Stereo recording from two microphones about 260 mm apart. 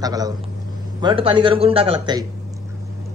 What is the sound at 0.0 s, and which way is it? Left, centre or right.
A man's voice, centre.